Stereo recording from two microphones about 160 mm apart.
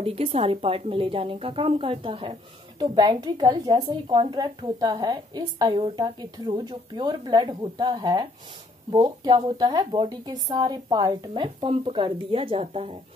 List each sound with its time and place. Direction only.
0.0 s a woman's voice: 35° right (ahead or behind)